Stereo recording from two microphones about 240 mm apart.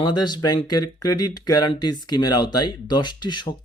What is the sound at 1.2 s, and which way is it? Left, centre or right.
Speech, left.